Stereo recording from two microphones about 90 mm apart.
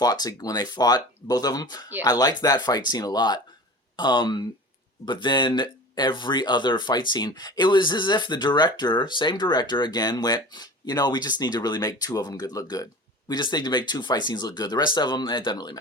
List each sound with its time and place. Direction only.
0.0 s speech: 45° left (ahead or behind)